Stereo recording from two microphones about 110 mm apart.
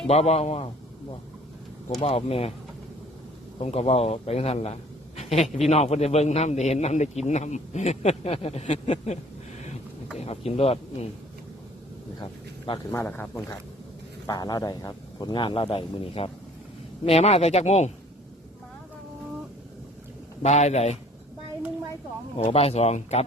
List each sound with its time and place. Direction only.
0.1 s speech: 70° left (ahead or behind)
2.0 s speech: 60° left (ahead or behind)
3.6 s a man's voice: 70° left (ahead or behind); by 9.1 s 90° left
10.2 s speech: 70° left (ahead or behind)
12.9 s speech: 20° left (ahead or behind)
14.3 s a man's voice: 40° left (ahead or behind); by 16.3 s 60° left (ahead or behind)
17.1 s speech: 70° left (ahead or behind)
20.4 s a man's voice: 85° left
22.4 s speech: 70° left (ahead or behind)